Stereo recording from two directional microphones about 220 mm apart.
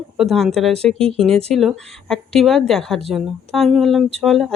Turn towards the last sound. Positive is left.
turn(degrees=0)  # may be behind; listen again after turning